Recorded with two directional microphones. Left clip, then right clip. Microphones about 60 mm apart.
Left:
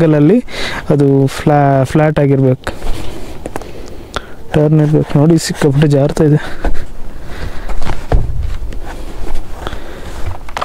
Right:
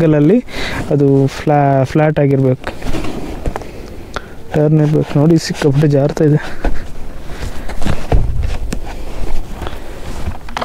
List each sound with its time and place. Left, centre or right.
0.0 s speech: left
4.1 s speech: left
7.3 s a sound: centre